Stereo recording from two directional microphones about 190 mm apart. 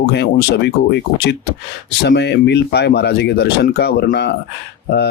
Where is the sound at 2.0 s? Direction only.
60° left (ahead or behind).